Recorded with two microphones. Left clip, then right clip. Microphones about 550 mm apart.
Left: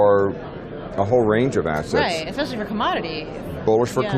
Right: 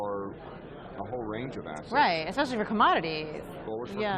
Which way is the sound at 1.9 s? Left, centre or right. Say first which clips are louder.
Right 1 dB; right.